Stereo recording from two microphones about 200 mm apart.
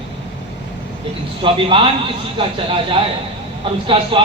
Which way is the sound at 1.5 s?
25° right (ahead or behind).